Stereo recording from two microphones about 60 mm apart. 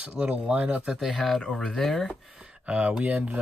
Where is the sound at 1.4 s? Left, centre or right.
Centre.